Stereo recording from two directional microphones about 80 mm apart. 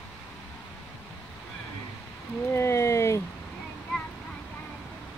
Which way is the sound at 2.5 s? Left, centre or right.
Left.